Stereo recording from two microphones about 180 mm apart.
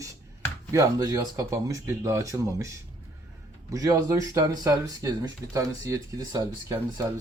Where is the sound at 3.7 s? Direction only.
20° right (ahead or behind).